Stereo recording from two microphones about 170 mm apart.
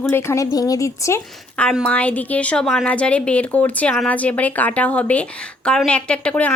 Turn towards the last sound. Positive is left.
turn(degrees=5)  # may be behind; listen again after turning